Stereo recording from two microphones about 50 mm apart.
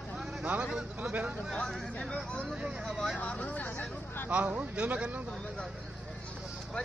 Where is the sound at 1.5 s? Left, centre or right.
Centre.